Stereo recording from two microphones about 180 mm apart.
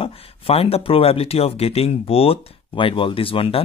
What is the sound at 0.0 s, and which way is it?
Speech, 35° left (ahead or behind).